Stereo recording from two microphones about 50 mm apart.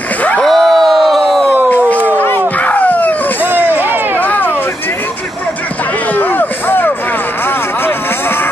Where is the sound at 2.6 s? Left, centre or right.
Left.